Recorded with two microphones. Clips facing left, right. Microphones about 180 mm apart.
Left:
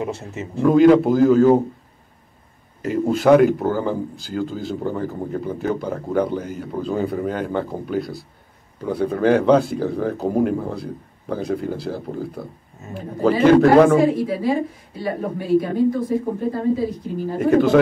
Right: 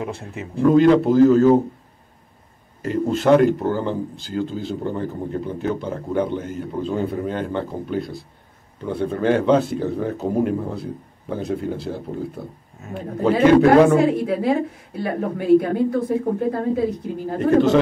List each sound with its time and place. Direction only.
0.0 s speech: centre (ahead or behind)
2.8 s speech: 5° left (ahead or behind)
14.2 s a woman's voice: 60° right (ahead or behind)